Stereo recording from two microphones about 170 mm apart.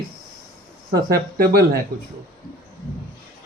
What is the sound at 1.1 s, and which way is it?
Speech, 60° right (ahead or behind).